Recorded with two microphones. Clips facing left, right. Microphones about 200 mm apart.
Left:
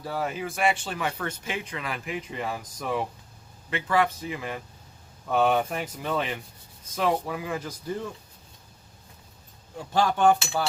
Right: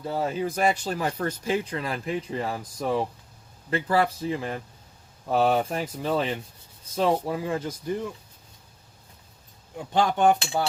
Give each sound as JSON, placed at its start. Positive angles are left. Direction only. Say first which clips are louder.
{"t": 0.0, "sound": "speech", "louder": "right 3 dB", "side_deg": -25}
{"t": 9.7, "sound": "speech", "louder": "right 1 dB", "side_deg": -20}